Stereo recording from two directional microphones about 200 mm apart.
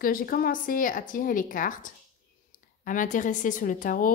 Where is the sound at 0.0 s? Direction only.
45° left (ahead or behind).